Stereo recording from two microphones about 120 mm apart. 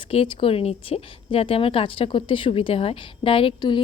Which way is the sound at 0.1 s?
50° left (ahead or behind).